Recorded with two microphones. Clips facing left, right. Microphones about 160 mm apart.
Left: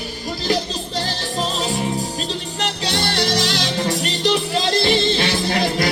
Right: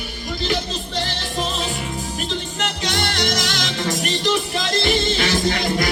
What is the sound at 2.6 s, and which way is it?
Music, 30° left (ahead or behind).